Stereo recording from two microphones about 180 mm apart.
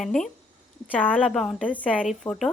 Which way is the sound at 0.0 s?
Centre (ahead or behind).